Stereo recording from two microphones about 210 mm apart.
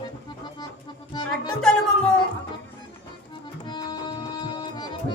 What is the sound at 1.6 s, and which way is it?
Speech, 5° left (ahead or behind).